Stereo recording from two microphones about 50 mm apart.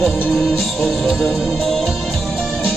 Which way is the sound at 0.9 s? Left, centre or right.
Centre.